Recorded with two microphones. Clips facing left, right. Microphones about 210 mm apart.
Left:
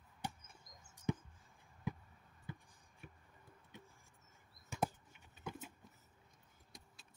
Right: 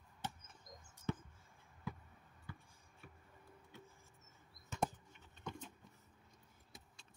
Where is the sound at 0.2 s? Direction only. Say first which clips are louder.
Left 1 dB; 10° left (ahead or behind).